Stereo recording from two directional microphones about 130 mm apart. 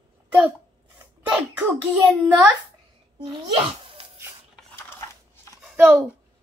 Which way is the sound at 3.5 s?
45° right (ahead or behind).